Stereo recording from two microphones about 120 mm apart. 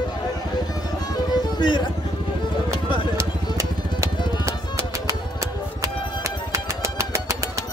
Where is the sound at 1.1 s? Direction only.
35° left (ahead or behind).